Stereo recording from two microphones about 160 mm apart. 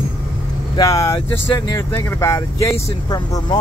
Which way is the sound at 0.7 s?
20° left (ahead or behind).